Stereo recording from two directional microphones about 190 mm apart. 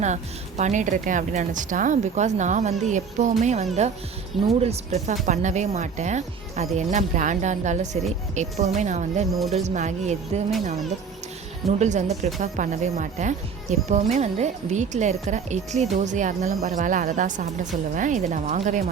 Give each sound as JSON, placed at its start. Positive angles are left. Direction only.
{"t": 0.0, "sound": "speech", "side_deg": -40}
{"t": 11.8, "sound": "speech", "side_deg": -40}